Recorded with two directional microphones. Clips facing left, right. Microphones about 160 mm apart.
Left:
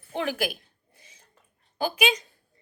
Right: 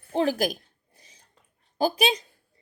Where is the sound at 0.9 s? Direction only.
35° right (ahead or behind).